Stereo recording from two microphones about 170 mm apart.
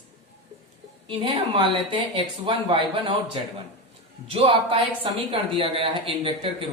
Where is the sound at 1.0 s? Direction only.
30° right (ahead or behind).